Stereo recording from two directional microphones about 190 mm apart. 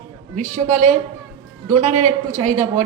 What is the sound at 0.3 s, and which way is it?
A woman's voice, 40° right (ahead or behind).